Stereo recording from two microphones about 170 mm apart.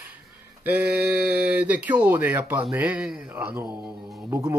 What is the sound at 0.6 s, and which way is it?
Speech, 10° right (ahead or behind).